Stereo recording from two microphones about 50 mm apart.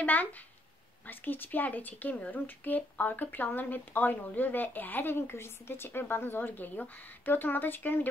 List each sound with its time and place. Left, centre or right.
0.0 s speech: left